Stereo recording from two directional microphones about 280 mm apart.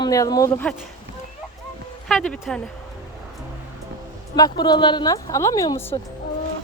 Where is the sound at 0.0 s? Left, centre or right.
Centre.